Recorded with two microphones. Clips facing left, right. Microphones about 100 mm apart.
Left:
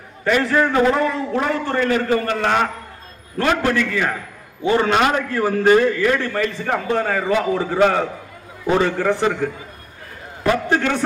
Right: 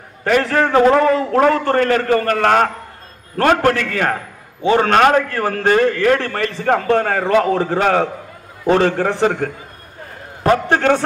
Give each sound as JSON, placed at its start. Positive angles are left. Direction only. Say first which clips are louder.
{"t": 0.4, "sound": "a man's voice", "louder": "right 3 dB", "side_deg": -60}
{"t": 10.4, "sound": "a man's voice", "louder": "right 4 dB", "side_deg": -50}